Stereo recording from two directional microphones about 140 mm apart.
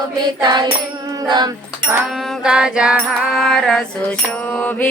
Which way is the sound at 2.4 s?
5° right (ahead or behind).